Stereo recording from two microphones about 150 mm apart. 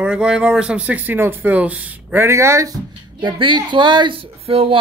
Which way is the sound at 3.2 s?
30° right (ahead or behind).